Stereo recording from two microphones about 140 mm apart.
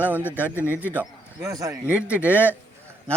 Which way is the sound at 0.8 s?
15° right (ahead or behind).